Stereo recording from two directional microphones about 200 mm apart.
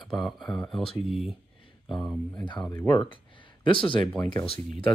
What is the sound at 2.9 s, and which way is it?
Speech, 25° left (ahead or behind).